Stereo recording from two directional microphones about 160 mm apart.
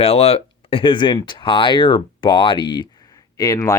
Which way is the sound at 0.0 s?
40° left (ahead or behind).